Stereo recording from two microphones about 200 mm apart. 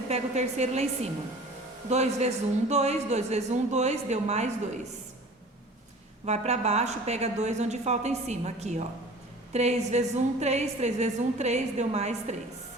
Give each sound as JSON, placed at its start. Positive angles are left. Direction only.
{"t": 0.1, "sound": "a woman's voice", "side_deg": -35}
{"t": 1.9, "sound": "a woman's voice", "side_deg": -35}
{"t": 6.2, "sound": "a woman's voice", "side_deg": -35}